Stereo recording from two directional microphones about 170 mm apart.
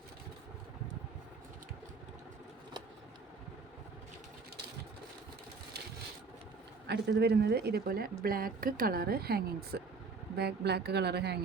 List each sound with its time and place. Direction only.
6.8 s a woman's voice: 80° right